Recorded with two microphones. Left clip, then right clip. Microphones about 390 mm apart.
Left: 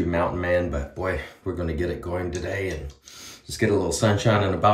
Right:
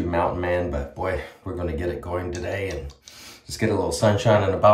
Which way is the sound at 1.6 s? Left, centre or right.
Right.